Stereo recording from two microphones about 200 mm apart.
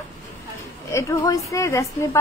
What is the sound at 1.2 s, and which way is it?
Speech, 15° left (ahead or behind).